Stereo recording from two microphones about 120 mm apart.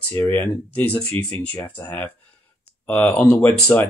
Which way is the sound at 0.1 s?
15° left (ahead or behind).